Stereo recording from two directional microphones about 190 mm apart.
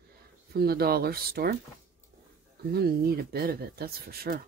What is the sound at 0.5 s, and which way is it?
Speech, 55° right (ahead or behind).